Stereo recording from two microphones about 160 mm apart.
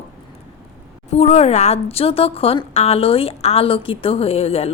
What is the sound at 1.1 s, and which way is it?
A woman's voice, 40° left (ahead or behind).